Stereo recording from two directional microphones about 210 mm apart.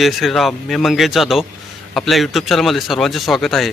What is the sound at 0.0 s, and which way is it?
A man's voice, centre (ahead or behind).